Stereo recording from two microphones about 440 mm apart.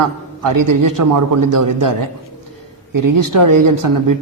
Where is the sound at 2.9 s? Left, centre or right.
Right.